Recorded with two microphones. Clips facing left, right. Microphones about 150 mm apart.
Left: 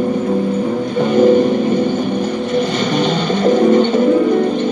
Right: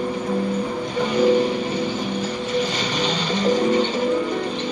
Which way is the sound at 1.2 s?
50° left (ahead or behind).